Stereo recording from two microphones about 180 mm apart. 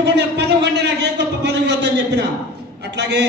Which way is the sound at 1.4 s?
70° right (ahead or behind).